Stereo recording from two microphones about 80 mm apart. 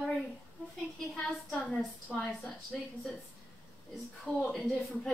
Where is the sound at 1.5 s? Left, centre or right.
Centre.